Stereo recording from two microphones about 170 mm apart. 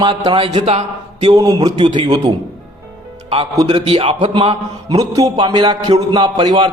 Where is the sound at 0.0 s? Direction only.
25° right (ahead or behind).